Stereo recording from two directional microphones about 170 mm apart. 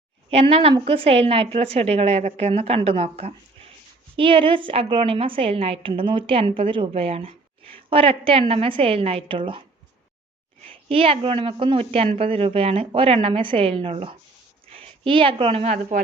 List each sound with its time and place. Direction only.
0.3 s a woman's voice: 35° right (ahead or behind)
10.7 s a woman's voice: 35° right (ahead or behind)